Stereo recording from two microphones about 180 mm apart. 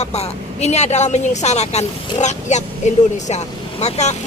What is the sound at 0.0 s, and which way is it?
Speech, 35° left (ahead or behind).